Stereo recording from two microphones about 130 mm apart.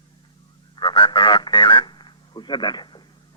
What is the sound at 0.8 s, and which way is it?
Radio, 35° left (ahead or behind).